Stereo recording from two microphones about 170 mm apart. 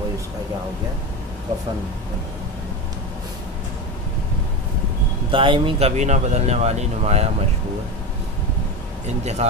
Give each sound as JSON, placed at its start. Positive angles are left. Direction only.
{"t": 5.3, "sound": "speech", "side_deg": -30}
{"t": 9.0, "sound": "speech", "side_deg": -40}